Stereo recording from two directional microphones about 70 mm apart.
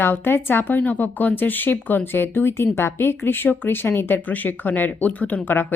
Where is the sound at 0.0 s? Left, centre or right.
Left.